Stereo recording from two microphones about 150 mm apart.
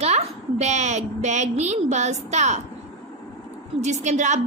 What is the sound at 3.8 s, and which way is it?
Speech, 50° right (ahead or behind).